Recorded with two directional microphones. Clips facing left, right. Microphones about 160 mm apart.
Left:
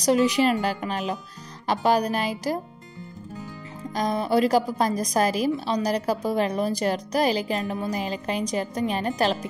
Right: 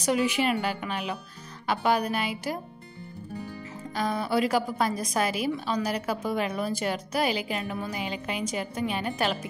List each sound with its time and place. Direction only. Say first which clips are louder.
0.0 s a woman's voice: left 5 dB; 35° left (ahead or behind)
3.9 s a woman's voice: left 4 dB; 40° left (ahead or behind)